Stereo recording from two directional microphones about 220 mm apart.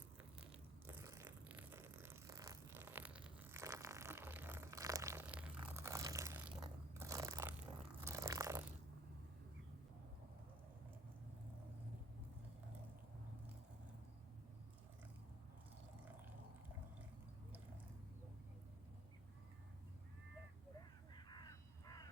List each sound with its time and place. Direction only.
0.2 s a sound: 5° right (ahead or behind)
6.9 s biting: 10° right (ahead or behind)
8.0 s crunch: 15° right (ahead or behind)
21.2 s crow: 20° left (ahead or behind)